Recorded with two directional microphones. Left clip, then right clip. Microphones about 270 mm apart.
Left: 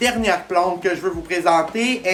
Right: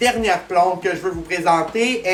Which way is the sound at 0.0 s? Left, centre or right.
Centre.